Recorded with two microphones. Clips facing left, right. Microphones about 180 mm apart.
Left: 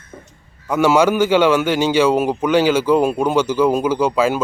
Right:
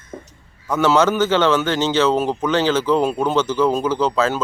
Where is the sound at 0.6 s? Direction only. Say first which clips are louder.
Left 2 dB; 10° left (ahead or behind).